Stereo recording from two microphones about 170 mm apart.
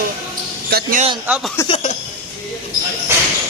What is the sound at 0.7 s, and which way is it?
Speech, 65° right (ahead or behind).